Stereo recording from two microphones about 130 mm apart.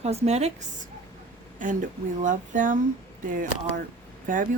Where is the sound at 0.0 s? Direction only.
55° right (ahead or behind).